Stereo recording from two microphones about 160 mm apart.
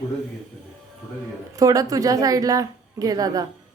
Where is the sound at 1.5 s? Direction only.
20° right (ahead or behind).